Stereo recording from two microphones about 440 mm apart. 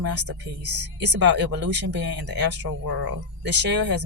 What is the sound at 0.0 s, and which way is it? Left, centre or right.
Speech, right.